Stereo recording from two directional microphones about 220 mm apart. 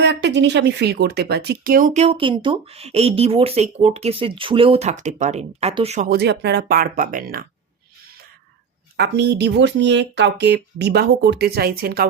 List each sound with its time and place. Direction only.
0.0 s speech: 50° right (ahead or behind); by 6.1 s 30° right (ahead or behind)
6.1 s speech: 50° right (ahead or behind)
9.0 s speech: 50° right (ahead or behind)